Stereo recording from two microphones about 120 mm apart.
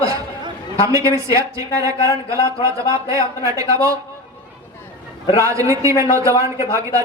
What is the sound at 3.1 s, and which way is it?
Speech, 30° right (ahead or behind).